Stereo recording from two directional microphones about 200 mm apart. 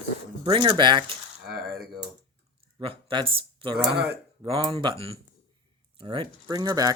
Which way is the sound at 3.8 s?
55° right (ahead or behind).